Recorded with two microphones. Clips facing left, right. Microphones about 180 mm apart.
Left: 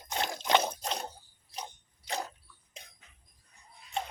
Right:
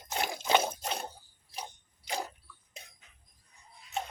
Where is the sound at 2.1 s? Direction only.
10° right (ahead or behind).